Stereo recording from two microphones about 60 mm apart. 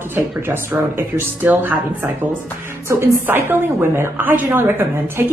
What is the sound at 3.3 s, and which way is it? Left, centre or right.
A woman's voice, right.